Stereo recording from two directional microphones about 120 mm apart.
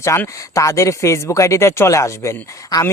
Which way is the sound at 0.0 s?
25° left (ahead or behind).